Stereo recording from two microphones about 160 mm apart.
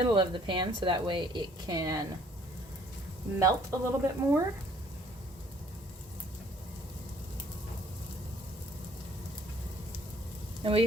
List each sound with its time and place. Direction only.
0.0 s a woman's voice: 30° right (ahead or behind)
3.3 s speech: 20° right (ahead or behind)
10.6 s speech: 35° right (ahead or behind)